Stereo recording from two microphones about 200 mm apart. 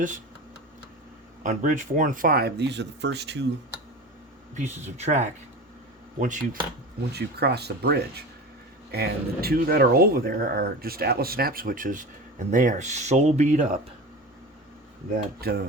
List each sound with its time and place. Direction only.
1.5 s speech: 40° right (ahead or behind); by 3.4 s 55° right (ahead or behind)
4.9 s speech: 35° right (ahead or behind)
7.1 s speech: 55° right (ahead or behind); by 13.7 s 35° right (ahead or behind)
15.4 s speech: 50° right (ahead or behind)